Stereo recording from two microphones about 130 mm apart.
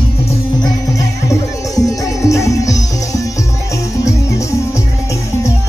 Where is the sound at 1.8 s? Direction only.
25° left (ahead or behind).